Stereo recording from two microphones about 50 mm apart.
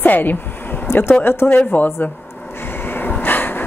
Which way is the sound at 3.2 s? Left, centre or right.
Left.